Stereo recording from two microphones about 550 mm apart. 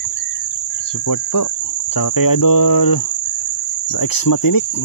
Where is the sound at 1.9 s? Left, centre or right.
Left.